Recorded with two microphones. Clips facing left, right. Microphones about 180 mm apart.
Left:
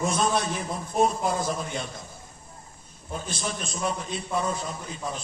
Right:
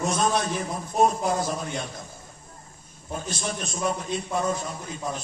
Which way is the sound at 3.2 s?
50° right (ahead or behind).